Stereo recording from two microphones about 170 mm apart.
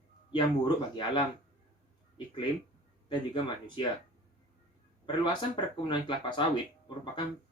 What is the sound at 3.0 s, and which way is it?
Speech, 25° left (ahead or behind).